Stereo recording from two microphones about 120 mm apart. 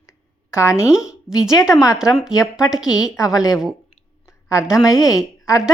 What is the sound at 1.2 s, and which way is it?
Speech, 5° right (ahead or behind).